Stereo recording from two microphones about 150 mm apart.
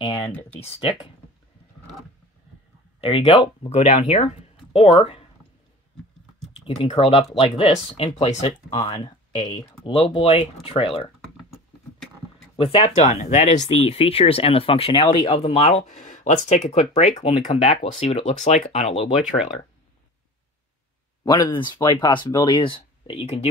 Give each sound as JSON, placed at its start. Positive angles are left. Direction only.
{"t": 0.1, "sound": "speech", "side_deg": 10}
{"t": 0.6, "sound": "speech", "side_deg": 40}
{"t": 3.0, "sound": "speech", "side_deg": 35}
{"t": 3.8, "sound": "speech", "side_deg": 50}
{"t": 4.7, "sound": "speech", "side_deg": 40}
{"t": 6.6, "sound": "speech", "side_deg": 35}
{"t": 12.5, "sound": "speech", "side_deg": 40}
{"t": 21.2, "sound": "speech", "side_deg": 30}